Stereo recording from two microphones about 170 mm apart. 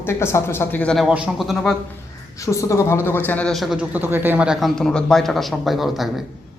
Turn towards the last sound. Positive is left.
turn(degrees=0)  # may be behind; listen again after turning